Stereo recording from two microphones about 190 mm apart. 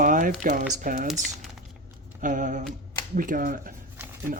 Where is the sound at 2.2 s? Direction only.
45° right (ahead or behind).